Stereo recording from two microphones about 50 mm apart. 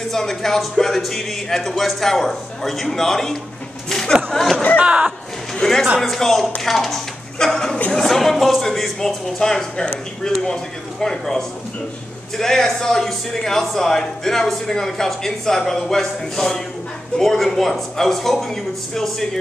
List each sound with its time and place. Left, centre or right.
0.1 s speech: centre
3.9 s a sound: centre
4.3 s speech: centre
4.7 s speech: right
5.5 s a sound: centre
5.9 s a woman's voice: centre